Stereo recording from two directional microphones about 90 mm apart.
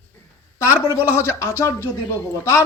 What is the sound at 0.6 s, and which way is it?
A man's voice, 30° left (ahead or behind).